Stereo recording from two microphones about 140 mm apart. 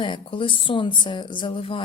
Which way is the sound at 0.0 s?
35° left (ahead or behind).